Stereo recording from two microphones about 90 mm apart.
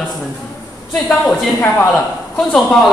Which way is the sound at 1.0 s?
5° left (ahead or behind).